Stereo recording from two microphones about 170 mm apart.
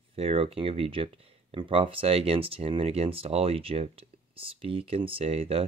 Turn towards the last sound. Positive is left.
turn(degrees=-35)  # may be behind; listen again after turning